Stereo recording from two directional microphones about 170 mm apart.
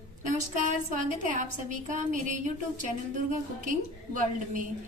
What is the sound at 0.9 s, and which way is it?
A woman's voice, 50° right (ahead or behind).